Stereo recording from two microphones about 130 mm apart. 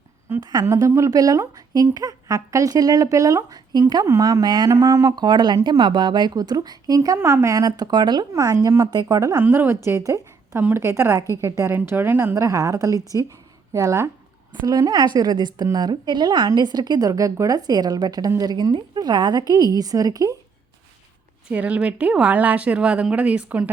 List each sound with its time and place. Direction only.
0.3 s a woman's voice: 30° right (ahead or behind)
21.4 s speech: 10° right (ahead or behind)